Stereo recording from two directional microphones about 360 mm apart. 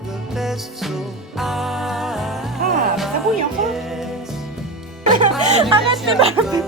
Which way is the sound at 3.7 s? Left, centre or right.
Centre.